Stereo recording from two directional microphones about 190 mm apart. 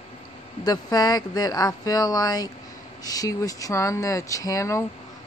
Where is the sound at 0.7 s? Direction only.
20° left (ahead or behind).